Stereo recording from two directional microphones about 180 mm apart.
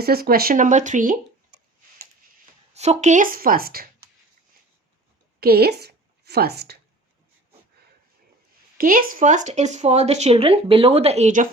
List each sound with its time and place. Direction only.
0.0 s speech: 60° right (ahead or behind)
2.7 s speech: 35° right (ahead or behind); by 3.8 s 55° right (ahead or behind)
5.4 s a woman's voice: 60° right (ahead or behind)
8.8 s speech: 50° right (ahead or behind)